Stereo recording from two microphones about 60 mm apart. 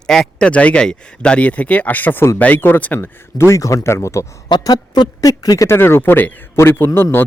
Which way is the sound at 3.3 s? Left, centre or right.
Left.